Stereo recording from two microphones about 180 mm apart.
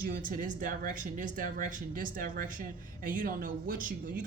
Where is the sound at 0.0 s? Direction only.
50° right (ahead or behind).